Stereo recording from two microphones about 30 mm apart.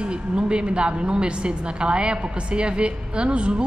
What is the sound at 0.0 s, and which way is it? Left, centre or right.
A woman's voice, right.